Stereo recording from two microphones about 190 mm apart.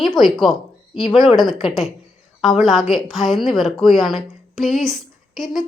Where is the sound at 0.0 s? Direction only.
Centre (ahead or behind).